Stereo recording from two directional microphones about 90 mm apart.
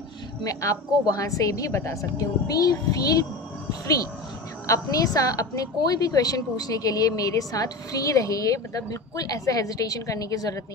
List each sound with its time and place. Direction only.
0.5 s a woman's voice: 40° left (ahead or behind)
4.6 s a woman's voice: 40° left (ahead or behind)